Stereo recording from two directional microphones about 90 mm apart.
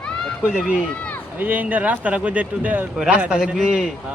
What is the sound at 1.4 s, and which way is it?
Speech, 20° right (ahead or behind).